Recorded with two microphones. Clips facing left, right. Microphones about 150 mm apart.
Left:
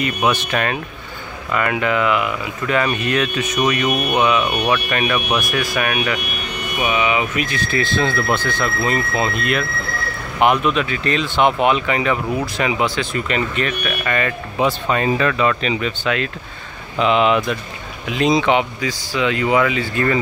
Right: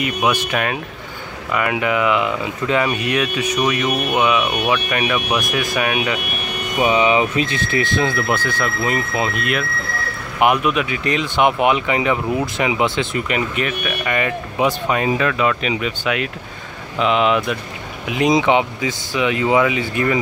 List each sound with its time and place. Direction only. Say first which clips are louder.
0.0 s speech: even; 10° right (ahead or behind)
6.8 s speech: right 4 dB; 30° right (ahead or behind); by 16.3 s 10° right (ahead or behind)
17.0 s speech: left 1 dB; centre (ahead or behind)
18.0 s speech: right 1 dB; 20° right (ahead or behind)